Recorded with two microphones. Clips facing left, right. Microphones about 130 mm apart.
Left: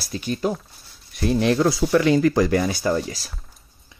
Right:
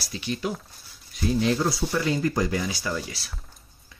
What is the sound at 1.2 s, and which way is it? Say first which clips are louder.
Speech: left 5 dB; 65° left (ahead or behind).